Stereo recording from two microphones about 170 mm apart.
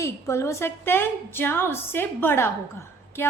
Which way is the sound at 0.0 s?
15° left (ahead or behind).